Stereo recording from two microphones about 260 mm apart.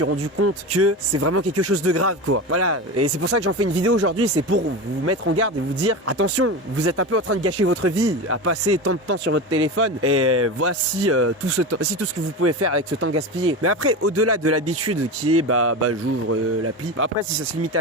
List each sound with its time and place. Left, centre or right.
0.0 s speech: right
9.2 s speech: right